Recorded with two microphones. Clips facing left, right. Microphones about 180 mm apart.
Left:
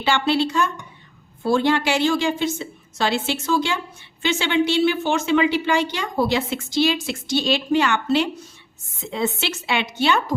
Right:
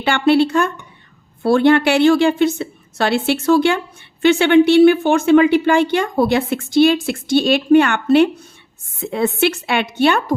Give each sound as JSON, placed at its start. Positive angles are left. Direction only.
{"t": 0.0, "sound": "a woman's voice", "side_deg": -55}